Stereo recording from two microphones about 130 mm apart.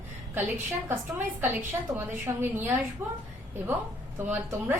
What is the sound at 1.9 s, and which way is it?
A woman's voice, 15° right (ahead or behind).